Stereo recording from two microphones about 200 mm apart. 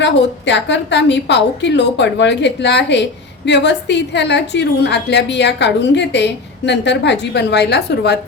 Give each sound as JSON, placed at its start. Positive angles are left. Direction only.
{"t": 0.0, "sound": "a woman's voice", "side_deg": 60}